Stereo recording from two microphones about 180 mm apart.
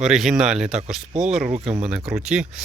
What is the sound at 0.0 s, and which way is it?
Speech, centre (ahead or behind).